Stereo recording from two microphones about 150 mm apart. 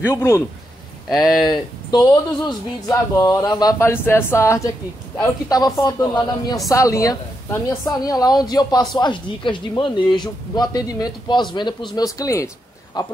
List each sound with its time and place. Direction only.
0.0 s a man's voice: 15° left (ahead or behind)
1.1 s speech: 25° left (ahead or behind)